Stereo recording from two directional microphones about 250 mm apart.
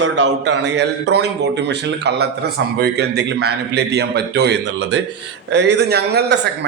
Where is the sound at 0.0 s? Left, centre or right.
Right.